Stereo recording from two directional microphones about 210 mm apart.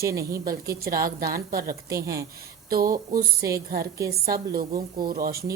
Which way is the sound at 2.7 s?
45° right (ahead or behind).